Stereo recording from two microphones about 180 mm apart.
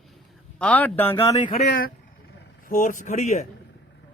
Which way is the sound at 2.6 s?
45° left (ahead or behind).